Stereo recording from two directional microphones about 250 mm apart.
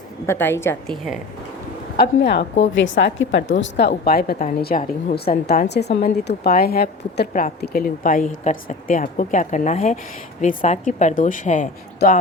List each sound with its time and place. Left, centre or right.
0.3 s a woman's voice: centre
2.0 s a woman's voice: left